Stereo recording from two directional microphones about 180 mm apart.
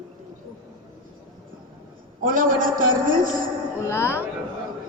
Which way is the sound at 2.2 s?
50° right (ahead or behind).